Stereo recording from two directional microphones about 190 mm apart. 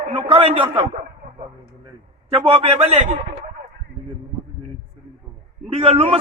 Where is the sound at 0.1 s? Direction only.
30° right (ahead or behind).